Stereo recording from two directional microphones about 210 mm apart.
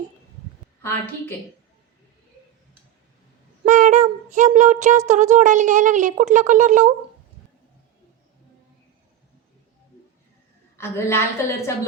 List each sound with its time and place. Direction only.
3.7 s speech: 35° right (ahead or behind)
10.8 s a woman's voice: 10° left (ahead or behind)